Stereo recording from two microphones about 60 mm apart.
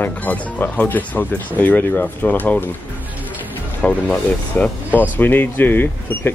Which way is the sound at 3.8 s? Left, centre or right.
Centre.